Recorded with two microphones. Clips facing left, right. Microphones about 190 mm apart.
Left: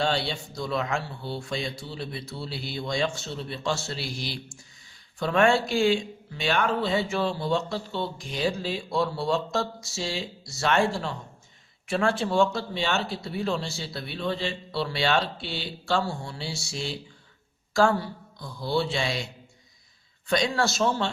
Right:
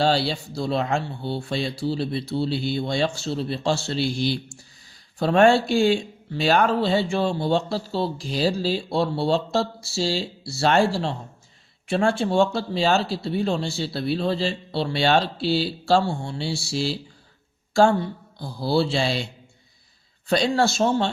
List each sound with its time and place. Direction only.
0.0 s speech: 35° right (ahead or behind)
5.2 s speech: 35° right (ahead or behind)